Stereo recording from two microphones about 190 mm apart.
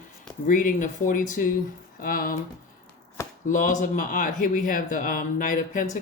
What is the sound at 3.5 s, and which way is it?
Speech, 40° left (ahead or behind).